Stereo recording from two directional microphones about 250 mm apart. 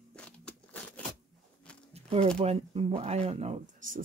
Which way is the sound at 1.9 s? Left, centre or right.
Right.